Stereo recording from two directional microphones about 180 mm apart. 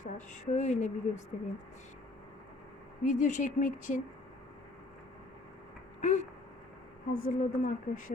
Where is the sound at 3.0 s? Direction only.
45° left (ahead or behind).